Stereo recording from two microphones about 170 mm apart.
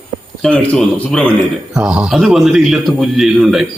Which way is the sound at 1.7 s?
5° right (ahead or behind).